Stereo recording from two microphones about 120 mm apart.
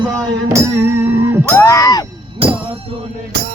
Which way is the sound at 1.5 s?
25° left (ahead or behind).